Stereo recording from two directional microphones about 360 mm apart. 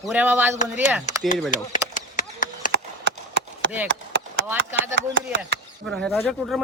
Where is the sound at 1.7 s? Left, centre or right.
Left.